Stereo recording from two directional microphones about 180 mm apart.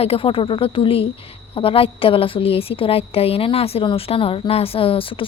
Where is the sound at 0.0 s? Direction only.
30° left (ahead or behind).